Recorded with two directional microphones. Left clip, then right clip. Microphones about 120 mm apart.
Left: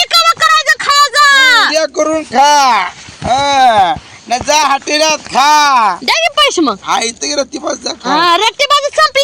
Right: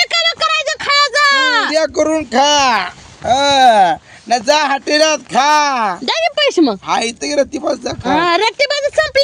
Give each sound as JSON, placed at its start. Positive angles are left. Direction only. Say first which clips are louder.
{"t": 0.1, "sound": "a sound", "louder": "left 6 dB", "side_deg": -25}
{"t": 1.7, "sound": "speech", "louder": "left 2 dB", "side_deg": -30}
{"t": 6.1, "sound": "speech", "louder": "left 4 dB", "side_deg": -25}
{"t": 6.8, "sound": "speech", "louder": "left 3 dB", "side_deg": -45}
{"t": 8.1, "sound": "speech", "louder": "left 4 dB", "side_deg": -20}